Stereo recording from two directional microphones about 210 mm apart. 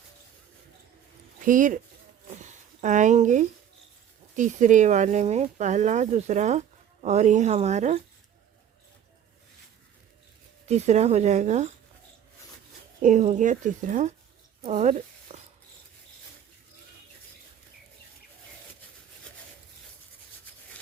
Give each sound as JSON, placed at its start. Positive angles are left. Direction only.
{"t": 1.5, "sound": "speech", "side_deg": -40}
{"t": 2.3, "sound": "a sound", "side_deg": -35}
{"t": 4.4, "sound": "speech", "side_deg": -35}
{"t": 10.7, "sound": "speech", "side_deg": -30}
{"t": 13.0, "sound": "speech", "side_deg": -35}
{"t": 14.6, "sound": "a sound", "side_deg": -30}